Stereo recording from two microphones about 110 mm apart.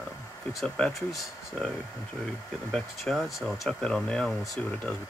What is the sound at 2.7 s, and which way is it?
Speech, 5° left (ahead or behind).